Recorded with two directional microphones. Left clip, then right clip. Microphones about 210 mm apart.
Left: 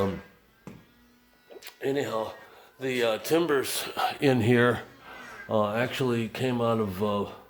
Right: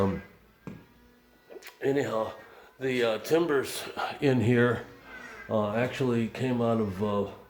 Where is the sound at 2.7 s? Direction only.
25° left (ahead or behind); by 7.3 s 50° left (ahead or behind).